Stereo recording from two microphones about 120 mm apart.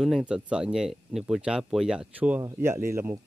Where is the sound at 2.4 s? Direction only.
20° right (ahead or behind).